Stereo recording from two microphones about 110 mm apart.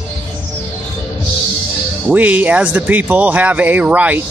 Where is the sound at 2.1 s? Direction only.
15° right (ahead or behind).